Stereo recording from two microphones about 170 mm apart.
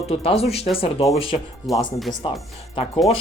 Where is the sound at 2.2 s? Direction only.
30° left (ahead or behind).